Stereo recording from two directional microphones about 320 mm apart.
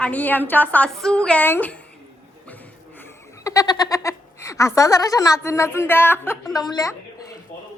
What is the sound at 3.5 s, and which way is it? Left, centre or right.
Speech, centre.